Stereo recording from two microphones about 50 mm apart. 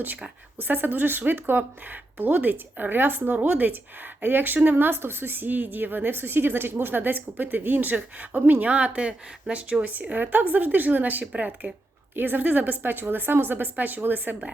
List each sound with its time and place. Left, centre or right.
0.6 s a woman's voice: right
3.2 s a woman's voice: right
4.9 s a woman's voice: right
9.9 s a woman's voice: right
12.1 s a woman's voice: right